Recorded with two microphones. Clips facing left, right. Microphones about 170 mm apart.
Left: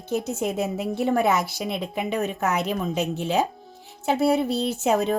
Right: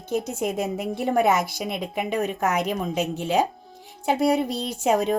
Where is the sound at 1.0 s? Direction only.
50° right (ahead or behind).